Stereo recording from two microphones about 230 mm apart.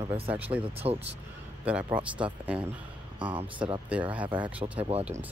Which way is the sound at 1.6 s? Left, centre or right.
Centre.